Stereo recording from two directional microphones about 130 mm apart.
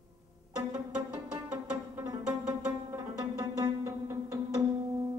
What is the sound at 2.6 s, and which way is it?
Music, 20° right (ahead or behind).